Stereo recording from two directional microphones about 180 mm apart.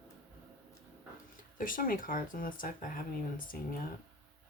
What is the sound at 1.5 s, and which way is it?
Speech, 50° left (ahead or behind).